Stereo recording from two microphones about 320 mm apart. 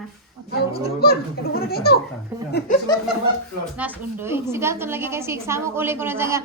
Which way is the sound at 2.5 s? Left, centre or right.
Left.